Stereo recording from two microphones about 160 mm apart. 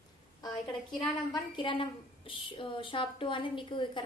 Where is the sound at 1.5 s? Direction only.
30° left (ahead or behind).